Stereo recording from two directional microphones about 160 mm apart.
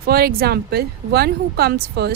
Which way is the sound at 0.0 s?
70° right (ahead or behind).